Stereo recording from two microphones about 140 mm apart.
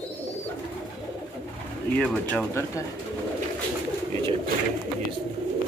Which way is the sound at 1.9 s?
10° left (ahead or behind).